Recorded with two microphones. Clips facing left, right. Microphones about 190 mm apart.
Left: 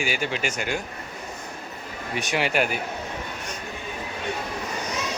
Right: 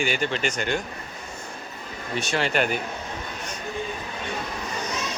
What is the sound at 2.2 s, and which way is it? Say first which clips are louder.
Speech: even; 15° left (ahead or behind).